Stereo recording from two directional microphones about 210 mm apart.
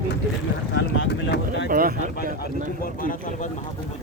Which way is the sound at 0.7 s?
60° left (ahead or behind).